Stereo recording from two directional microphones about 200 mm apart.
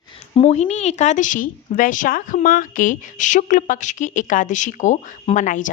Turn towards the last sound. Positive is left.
turn(degrees=40)  # may be behind; listen again after turning